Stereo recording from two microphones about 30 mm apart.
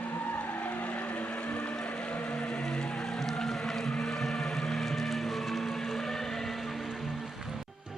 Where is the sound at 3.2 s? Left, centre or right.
Centre.